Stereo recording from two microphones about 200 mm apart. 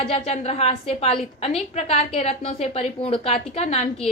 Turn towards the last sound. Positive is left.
turn(degrees=30)  # may be behind; listen again after turning